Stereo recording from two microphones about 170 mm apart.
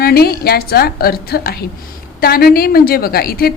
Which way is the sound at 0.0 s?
65° left (ahead or behind).